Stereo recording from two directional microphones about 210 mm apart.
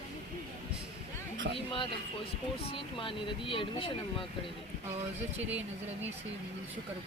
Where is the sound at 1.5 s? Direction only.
25° left (ahead or behind).